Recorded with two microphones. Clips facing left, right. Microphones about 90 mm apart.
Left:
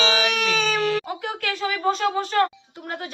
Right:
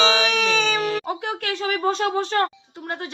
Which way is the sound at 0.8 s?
25° right (ahead or behind).